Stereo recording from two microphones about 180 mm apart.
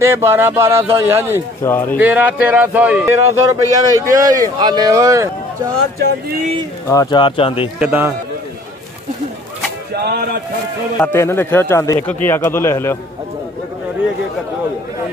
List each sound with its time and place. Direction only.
0.0 s speech: 15° right (ahead or behind)
1.6 s speech: 10° left (ahead or behind)
2.0 s speech: 10° right (ahead or behind)
6.9 s speech: 20° left (ahead or behind)
7.8 s speech: 10° right (ahead or behind)
11.0 s speech: 10° left (ahead or behind)